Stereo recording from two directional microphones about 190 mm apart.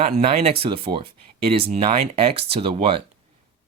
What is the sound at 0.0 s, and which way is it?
Speech, 35° right (ahead or behind).